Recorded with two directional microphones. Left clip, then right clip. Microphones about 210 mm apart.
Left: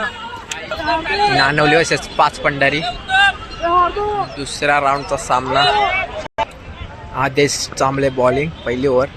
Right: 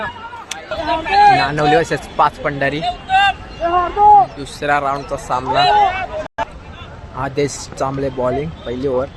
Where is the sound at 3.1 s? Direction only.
45° left (ahead or behind).